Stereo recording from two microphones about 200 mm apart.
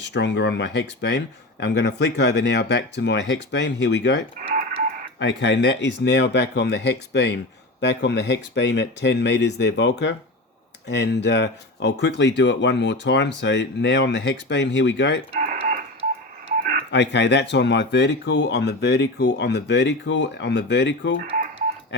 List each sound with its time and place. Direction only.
0.0 s speech: 60° left (ahead or behind)
5.2 s speech: 60° left (ahead or behind)
15.4 s a sound: 40° right (ahead or behind)
16.9 s speech: 60° left (ahead or behind)